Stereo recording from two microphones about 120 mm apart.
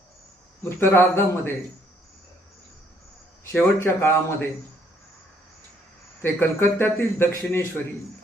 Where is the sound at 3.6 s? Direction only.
20° left (ahead or behind).